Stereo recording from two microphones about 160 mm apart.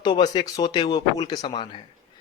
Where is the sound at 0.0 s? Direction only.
25° left (ahead or behind).